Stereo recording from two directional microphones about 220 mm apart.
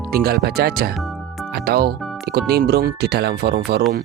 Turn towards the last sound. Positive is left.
turn(degrees=-50)  # may be behind; listen again after turning